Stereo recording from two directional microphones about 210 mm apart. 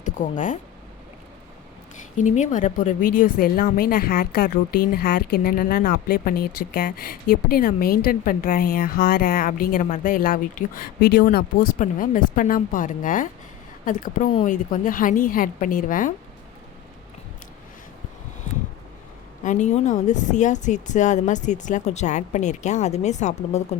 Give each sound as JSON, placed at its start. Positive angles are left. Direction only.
{"t": 0.0, "sound": "speech", "side_deg": 40}
{"t": 2.1, "sound": "a woman's voice", "side_deg": 35}
{"t": 19.5, "sound": "speech", "side_deg": 35}